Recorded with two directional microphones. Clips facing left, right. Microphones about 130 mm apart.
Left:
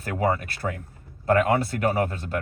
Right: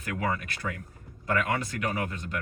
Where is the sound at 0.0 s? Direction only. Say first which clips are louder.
Left 6 dB; 35° left (ahead or behind).